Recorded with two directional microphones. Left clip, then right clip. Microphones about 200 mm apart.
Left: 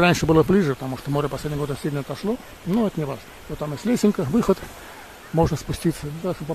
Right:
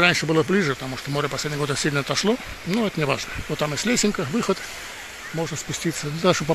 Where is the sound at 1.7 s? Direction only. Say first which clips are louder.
Right 5 dB; 10° left (ahead or behind).